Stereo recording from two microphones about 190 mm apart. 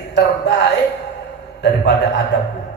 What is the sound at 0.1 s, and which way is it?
Speech, 65° left (ahead or behind).